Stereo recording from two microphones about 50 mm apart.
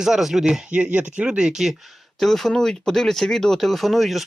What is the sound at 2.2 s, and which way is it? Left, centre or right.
Speech, centre.